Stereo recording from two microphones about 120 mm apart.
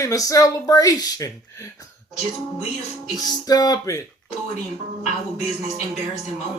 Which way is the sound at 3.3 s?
35° left (ahead or behind).